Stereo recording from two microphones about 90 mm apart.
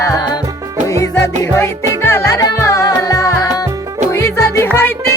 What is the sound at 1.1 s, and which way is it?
Music, 25° left (ahead or behind).